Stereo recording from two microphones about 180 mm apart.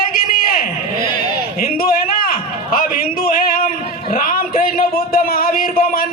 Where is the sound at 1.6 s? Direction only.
55° left (ahead or behind).